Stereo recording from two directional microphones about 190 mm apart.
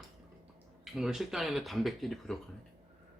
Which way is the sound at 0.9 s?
Centre (ahead or behind).